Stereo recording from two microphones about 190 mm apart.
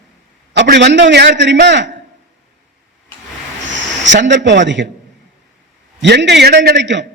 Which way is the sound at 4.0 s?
70° right (ahead or behind).